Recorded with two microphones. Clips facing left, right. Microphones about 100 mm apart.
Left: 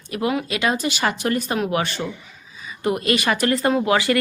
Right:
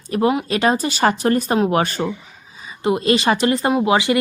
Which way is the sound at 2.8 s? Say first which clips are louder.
Right 4 dB; 25° right (ahead or behind).